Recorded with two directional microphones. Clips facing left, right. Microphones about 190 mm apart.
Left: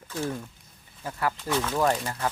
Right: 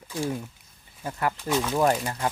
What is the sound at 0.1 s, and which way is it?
Speech, 10° right (ahead or behind).